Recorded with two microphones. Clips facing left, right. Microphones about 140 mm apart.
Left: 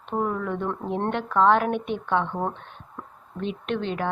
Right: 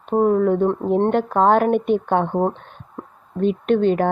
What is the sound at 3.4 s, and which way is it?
Speech, 45° right (ahead or behind).